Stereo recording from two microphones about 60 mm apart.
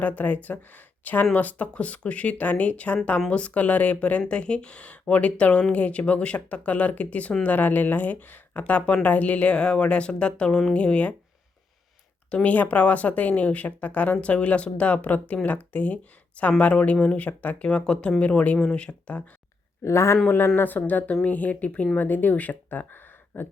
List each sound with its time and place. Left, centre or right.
0.0 s speech: left
12.3 s speech: left
19.8 s speech: left
20.6 s speech: left